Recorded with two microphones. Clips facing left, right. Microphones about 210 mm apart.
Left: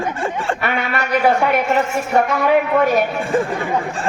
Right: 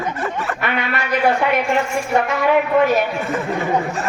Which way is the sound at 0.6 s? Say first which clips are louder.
Left 1 dB; 45° left (ahead or behind).